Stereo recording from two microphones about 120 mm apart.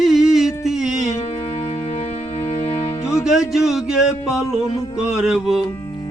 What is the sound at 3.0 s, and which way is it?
Music, 25° left (ahead or behind).